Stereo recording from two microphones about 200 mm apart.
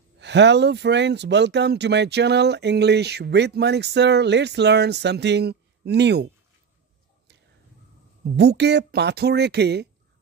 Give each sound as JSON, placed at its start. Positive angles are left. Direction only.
{"t": 0.2, "sound": "speech", "side_deg": -60}
{"t": 8.4, "sound": "speech", "side_deg": -55}